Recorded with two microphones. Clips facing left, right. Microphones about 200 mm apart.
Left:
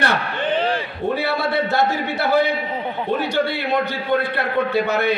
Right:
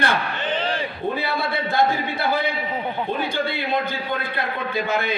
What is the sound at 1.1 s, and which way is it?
A man's voice, 75° left (ahead or behind).